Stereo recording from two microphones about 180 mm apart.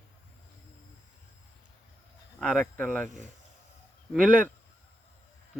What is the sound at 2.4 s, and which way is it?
Speech, 5° left (ahead or behind).